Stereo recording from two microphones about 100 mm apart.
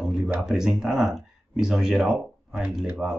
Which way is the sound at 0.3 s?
5° right (ahead or behind).